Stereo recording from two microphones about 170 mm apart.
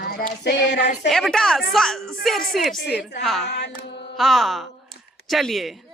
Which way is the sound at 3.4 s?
80° left.